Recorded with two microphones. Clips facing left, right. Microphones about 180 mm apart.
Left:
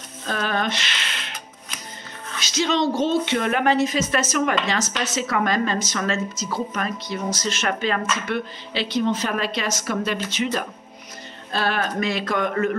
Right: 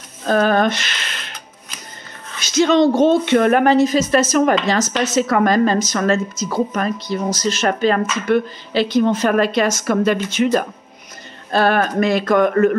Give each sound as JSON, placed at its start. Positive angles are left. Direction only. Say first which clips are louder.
{"t": 0.3, "sound": "speech", "louder": "right 9 dB", "side_deg": -45}
{"t": 2.4, "sound": "a woman's voice", "louder": "right 8 dB", "side_deg": -50}